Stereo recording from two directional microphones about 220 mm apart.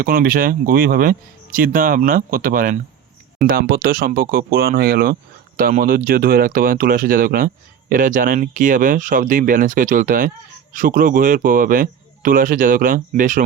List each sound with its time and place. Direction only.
0.0 s speech: 40° right (ahead or behind)